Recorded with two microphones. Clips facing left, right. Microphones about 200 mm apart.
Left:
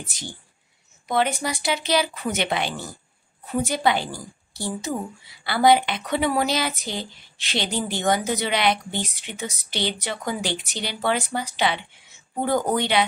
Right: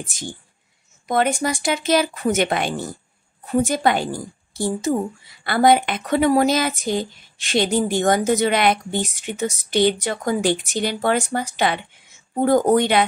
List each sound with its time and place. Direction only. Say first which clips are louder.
0.0 s speech: right 5 dB; 50° right (ahead or behind)